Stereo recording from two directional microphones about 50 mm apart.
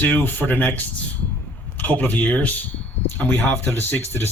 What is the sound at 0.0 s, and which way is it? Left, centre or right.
Speech, left.